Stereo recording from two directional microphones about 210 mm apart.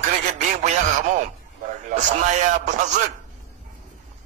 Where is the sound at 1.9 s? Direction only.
35° right (ahead or behind).